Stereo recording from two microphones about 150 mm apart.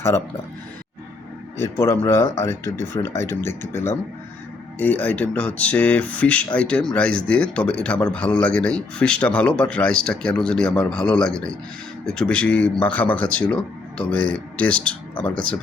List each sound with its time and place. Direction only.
1.5 s speech: 15° left (ahead or behind)